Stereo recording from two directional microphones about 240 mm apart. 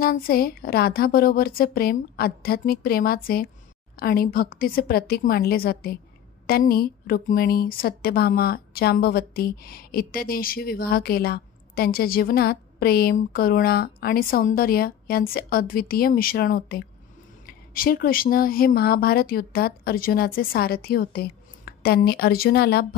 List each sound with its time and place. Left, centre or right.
0.0 s speech: left